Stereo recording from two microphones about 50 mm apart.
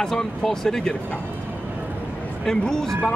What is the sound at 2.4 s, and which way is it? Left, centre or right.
Speech, centre.